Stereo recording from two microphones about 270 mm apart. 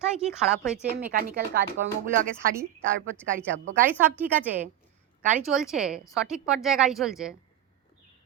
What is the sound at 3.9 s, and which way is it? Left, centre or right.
A woman's voice, centre.